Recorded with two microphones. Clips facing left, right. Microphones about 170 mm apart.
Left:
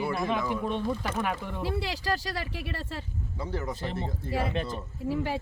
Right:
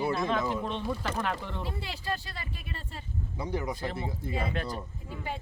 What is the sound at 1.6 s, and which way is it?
Speech, 90° left.